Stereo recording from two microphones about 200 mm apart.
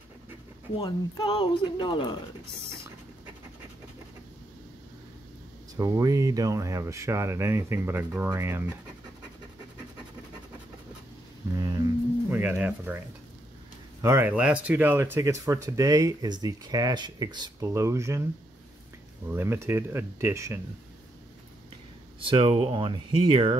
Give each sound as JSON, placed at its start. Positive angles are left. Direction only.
{"t": 0.7, "sound": "speech", "side_deg": 20}
{"t": 5.8, "sound": "speech", "side_deg": -15}
{"t": 12.3, "sound": "speech", "side_deg": -10}
{"t": 14.0, "sound": "speech", "side_deg": -10}
{"t": 19.2, "sound": "speech", "side_deg": -10}
{"t": 22.3, "sound": "speech", "side_deg": -25}